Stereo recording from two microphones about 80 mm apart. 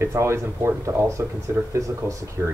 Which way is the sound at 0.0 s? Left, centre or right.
Right.